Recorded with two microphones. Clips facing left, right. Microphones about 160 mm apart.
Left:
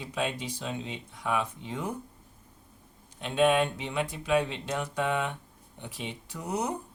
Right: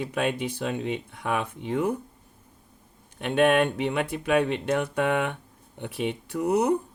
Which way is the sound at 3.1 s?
60° right (ahead or behind).